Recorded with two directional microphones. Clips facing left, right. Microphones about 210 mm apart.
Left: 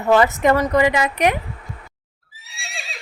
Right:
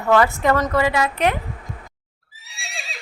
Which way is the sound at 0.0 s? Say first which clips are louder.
Left 2 dB; 20° left (ahead or behind).